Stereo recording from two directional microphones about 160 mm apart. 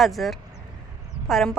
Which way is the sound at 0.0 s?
Centre (ahead or behind).